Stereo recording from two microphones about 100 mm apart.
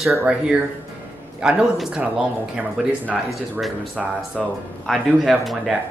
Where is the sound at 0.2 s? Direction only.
10° right (ahead or behind).